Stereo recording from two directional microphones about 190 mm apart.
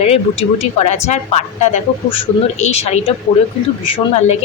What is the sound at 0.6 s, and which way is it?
A woman's voice, 35° left (ahead or behind).